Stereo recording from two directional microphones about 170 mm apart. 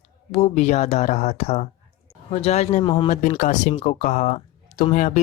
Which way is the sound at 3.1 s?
45° left (ahead or behind).